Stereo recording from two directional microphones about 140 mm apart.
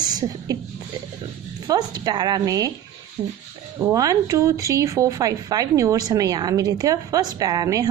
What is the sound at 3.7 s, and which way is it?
Speech, 20° right (ahead or behind).